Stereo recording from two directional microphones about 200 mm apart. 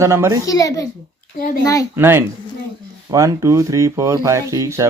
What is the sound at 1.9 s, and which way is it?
Speech, 10° right (ahead or behind).